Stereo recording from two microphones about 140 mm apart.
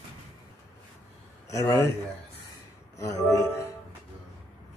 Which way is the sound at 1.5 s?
20° left (ahead or behind).